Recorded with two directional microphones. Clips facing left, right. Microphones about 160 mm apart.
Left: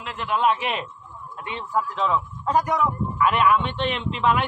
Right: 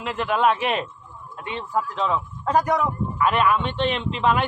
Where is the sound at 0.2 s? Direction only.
55° right (ahead or behind).